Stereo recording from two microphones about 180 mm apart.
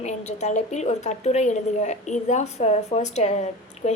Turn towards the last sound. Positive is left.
turn(degrees=40)  # may be behind; listen again after turning